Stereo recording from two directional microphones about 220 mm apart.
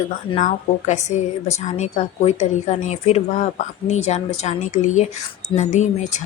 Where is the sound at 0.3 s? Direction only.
35° left (ahead or behind).